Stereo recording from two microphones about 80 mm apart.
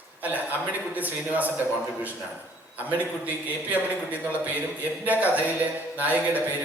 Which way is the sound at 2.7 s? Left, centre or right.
Right.